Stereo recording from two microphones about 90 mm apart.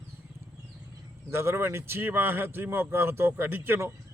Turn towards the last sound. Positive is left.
turn(degrees=-25)  # may be behind; listen again after turning